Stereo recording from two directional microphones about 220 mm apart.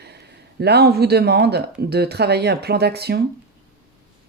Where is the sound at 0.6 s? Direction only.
45° right (ahead or behind).